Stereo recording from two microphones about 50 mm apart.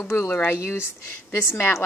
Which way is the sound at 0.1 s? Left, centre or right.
Left.